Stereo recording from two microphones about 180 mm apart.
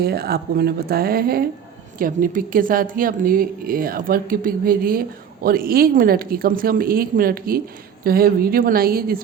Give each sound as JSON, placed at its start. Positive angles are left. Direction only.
{"t": 0.0, "sound": "a woman's voice", "side_deg": -60}